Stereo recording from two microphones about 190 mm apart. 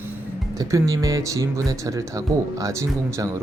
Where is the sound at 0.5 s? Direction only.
20° right (ahead or behind).